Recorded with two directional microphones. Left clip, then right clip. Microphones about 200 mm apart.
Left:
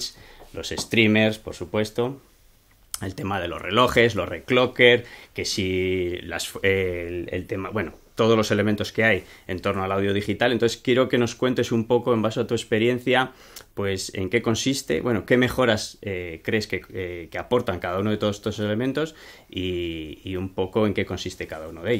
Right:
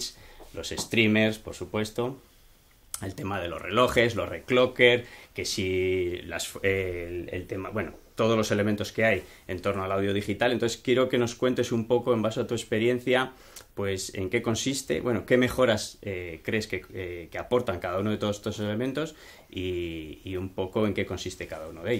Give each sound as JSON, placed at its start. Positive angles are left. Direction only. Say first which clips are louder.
{"t": 0.6, "sound": "speech", "louder": "left 4 dB", "side_deg": 40}